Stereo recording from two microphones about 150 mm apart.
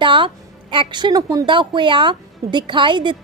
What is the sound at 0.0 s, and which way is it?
A woman's voice, 35° right (ahead or behind).